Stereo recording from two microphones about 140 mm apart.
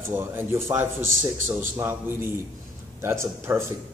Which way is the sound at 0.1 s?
15° right (ahead or behind).